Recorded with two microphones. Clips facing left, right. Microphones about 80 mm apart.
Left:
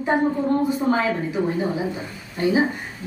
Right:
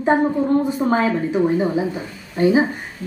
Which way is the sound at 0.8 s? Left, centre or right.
Right.